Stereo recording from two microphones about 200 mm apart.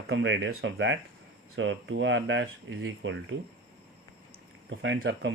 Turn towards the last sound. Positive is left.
turn(degrees=-65)  # may be behind; listen again after turning